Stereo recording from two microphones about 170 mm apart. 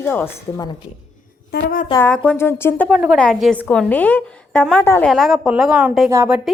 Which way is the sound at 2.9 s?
Centre (ahead or behind).